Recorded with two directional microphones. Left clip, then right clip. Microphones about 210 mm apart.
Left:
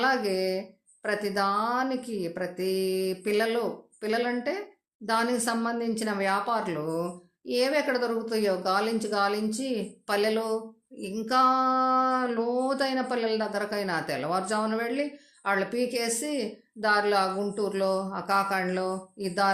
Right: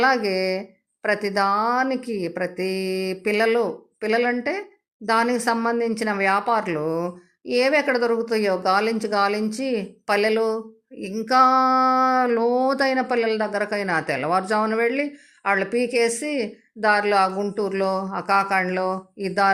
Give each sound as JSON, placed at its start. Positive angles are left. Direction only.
{"t": 0.0, "sound": "speech", "side_deg": -35}